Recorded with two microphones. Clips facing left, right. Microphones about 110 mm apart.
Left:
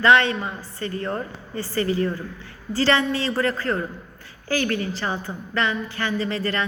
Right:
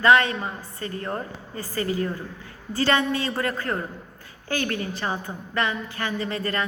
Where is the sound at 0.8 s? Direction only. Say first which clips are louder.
Left 4 dB; 25° right (ahead or behind).